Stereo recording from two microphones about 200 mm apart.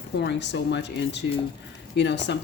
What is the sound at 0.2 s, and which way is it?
Speech, 60° left (ahead or behind).